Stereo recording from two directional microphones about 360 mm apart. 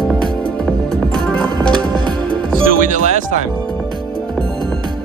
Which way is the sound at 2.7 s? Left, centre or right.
Right.